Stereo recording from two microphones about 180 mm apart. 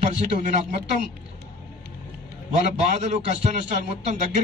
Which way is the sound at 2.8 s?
40° right (ahead or behind).